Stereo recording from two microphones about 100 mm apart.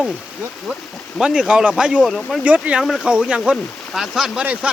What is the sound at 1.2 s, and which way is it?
Speech, 10° right (ahead or behind).